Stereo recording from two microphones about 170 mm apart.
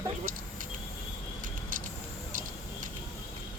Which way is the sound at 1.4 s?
55° right (ahead or behind).